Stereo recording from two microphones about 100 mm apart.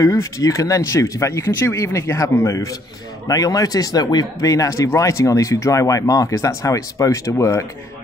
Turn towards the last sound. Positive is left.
turn(degrees=30)  # may be behind; listen again after turning